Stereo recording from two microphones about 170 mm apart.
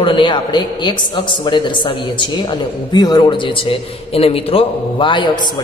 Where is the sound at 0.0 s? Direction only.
30° left (ahead or behind).